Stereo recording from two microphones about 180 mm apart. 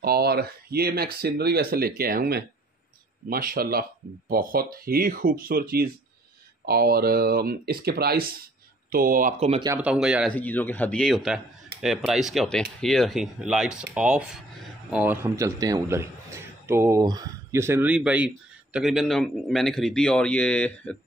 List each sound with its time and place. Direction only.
0.0 s speech: 60° right (ahead or behind)
9.8 s speech: 5° right (ahead or behind)
10.3 s a man's voice: 10° left (ahead or behind)